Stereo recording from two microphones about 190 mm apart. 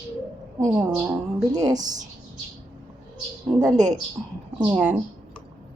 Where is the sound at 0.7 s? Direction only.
5° right (ahead or behind).